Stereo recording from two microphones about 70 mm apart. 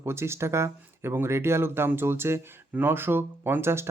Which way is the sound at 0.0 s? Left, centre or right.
Right.